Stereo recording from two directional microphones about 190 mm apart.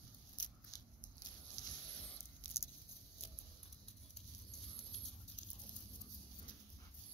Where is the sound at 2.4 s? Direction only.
10° left (ahead or behind).